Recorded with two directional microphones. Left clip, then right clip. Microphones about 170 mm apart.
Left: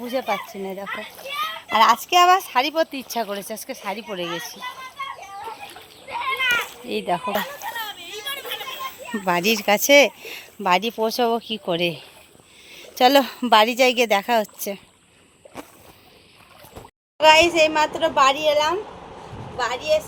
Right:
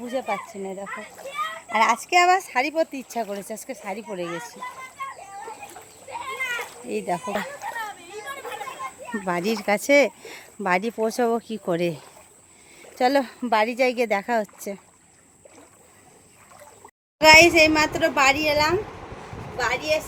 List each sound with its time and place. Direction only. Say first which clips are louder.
0.1 s speech: left 3 dB; 25° left (ahead or behind)
1.8 s speech: left 3 dB; centre (ahead or behind)
6.1 s a sound: left 7 dB; 20° right (ahead or behind)
6.8 s speech: left 3 dB; centre (ahead or behind)
7.6 s children playing: left 2 dB; 30° right (ahead or behind)
9.2 s speech: left 5 dB; centre (ahead or behind); by 12.0 s 25° right (ahead or behind)
12.7 s speech: left 5 dB; 5° left (ahead or behind)
17.2 s speech: right 1 dB; 20° right (ahead or behind); by 20.0 s centre (ahead or behind)